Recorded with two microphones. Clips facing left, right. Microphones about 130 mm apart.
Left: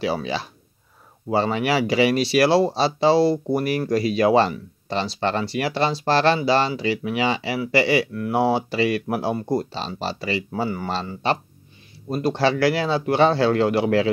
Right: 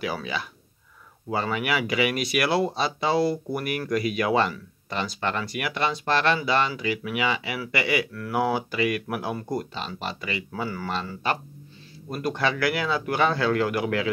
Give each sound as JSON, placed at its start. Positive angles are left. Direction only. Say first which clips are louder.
{"t": 0.0, "sound": "speech", "louder": "left 5 dB", "side_deg": 30}